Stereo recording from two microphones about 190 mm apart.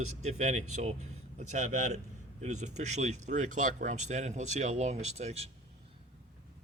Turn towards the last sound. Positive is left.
turn(degrees=-35)  # may be behind; listen again after turning